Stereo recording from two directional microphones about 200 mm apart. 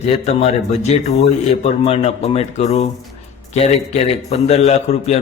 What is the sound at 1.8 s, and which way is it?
A man's voice, 30° left (ahead or behind).